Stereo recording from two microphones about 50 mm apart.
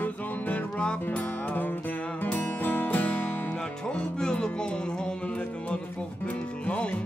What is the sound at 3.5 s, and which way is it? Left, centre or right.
Music, left.